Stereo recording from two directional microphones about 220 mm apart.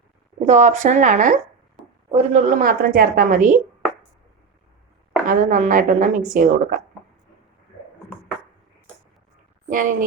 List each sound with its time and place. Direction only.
0.4 s speech: 30° right (ahead or behind)
5.2 s speech: 40° right (ahead or behind)
9.6 s speech: 35° right (ahead or behind)